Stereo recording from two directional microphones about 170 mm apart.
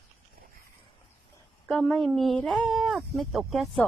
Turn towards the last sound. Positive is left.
turn(degrees=0)  # may be behind; listen again after turning